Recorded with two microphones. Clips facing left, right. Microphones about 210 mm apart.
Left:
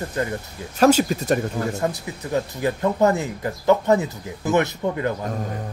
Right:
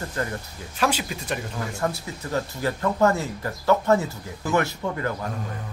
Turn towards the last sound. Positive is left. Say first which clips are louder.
# left 4 dB
turn(degrees=20)  # may be behind; listen again after turning